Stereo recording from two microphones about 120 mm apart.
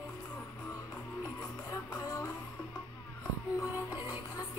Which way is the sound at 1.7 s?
30° left (ahead or behind).